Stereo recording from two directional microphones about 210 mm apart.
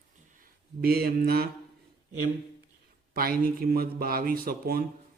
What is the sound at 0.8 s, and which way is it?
Speech, 45° right (ahead or behind).